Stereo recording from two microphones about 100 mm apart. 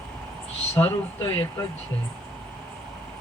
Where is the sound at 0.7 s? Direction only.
30° left (ahead or behind).